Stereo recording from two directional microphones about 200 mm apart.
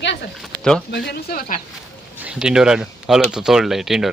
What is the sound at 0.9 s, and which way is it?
Speech, 50° left (ahead or behind).